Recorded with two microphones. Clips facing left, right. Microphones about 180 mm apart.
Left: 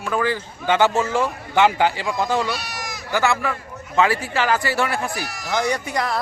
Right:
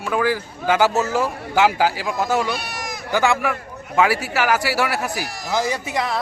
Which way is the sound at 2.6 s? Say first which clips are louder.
Right 2 dB; 55° right (ahead or behind).